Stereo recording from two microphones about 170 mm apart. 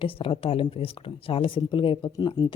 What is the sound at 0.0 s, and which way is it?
Speech, 30° left (ahead or behind).